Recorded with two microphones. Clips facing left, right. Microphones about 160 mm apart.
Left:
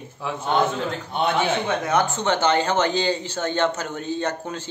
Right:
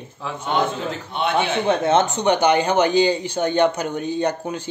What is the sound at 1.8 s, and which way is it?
Speech, 20° right (ahead or behind).